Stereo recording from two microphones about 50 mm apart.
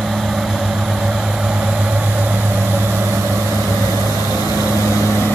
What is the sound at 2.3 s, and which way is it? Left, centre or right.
Vehicle, right.